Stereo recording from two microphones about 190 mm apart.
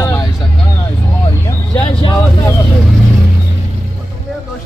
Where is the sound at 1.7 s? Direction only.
25° left (ahead or behind).